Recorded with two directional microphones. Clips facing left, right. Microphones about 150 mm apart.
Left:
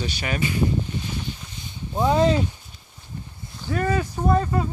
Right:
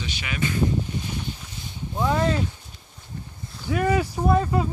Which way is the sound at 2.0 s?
20° left (ahead or behind).